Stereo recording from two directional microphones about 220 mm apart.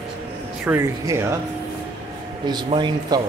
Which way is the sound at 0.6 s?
10° right (ahead or behind).